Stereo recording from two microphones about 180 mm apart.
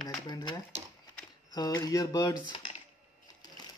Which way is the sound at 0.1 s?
20° left (ahead or behind).